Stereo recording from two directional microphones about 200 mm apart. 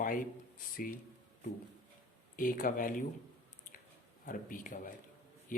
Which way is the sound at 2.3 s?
45° left (ahead or behind).